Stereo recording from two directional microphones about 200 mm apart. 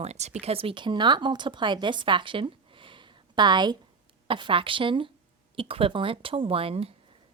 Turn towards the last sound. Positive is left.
turn(degrees=-30)  # may be behind; listen again after turning